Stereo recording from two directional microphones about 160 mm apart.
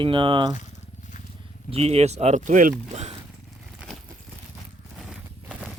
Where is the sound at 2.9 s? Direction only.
45° right (ahead or behind).